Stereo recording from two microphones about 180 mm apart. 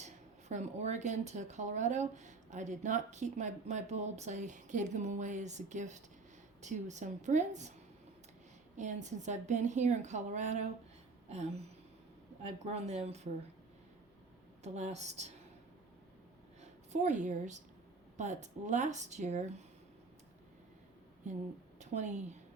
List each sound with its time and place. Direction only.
0.0 s speech: 40° right (ahead or behind)
8.7 s speech: 40° right (ahead or behind)
12.4 s speech: 40° right (ahead or behind)
14.6 s speech: 40° right (ahead or behind)
16.6 s a woman's voice: 40° right (ahead or behind)
21.8 s a woman's voice: 40° right (ahead or behind)